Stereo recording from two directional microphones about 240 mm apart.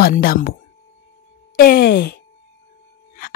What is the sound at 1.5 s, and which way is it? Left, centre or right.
Speech, left.